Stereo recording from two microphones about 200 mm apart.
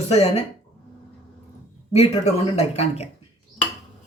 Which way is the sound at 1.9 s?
30° left (ahead or behind).